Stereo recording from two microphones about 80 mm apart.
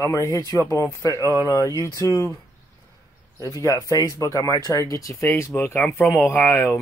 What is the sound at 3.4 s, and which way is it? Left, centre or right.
Speech, left.